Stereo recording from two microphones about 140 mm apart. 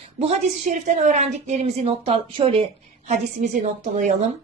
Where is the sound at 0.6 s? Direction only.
55° right (ahead or behind).